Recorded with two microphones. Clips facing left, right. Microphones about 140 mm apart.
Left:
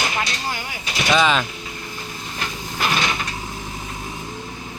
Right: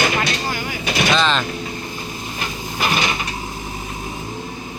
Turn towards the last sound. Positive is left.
turn(degrees=-5)  # may be behind; listen again after turning